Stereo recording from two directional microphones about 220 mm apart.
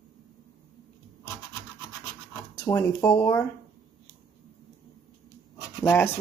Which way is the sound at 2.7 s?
15° left (ahead or behind).